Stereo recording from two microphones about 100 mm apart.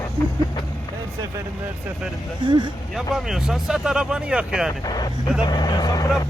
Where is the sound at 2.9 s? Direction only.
Centre (ahead or behind).